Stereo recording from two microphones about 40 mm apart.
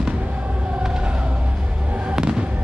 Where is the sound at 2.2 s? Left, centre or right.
Right.